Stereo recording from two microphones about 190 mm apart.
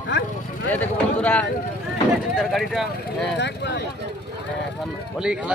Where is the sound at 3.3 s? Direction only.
65° left (ahead or behind).